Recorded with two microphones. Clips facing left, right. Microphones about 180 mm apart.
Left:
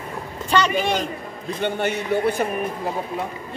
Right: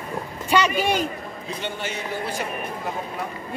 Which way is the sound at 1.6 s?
60° left (ahead or behind).